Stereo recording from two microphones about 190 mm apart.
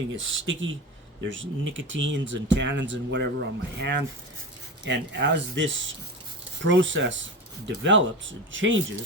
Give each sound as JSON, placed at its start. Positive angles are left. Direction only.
{"t": 0.2, "sound": "speech", "side_deg": -90}